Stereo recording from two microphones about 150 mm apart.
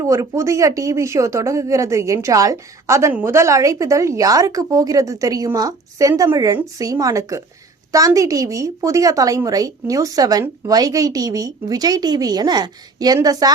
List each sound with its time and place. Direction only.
0.0 s a woman's voice: 20° right (ahead or behind)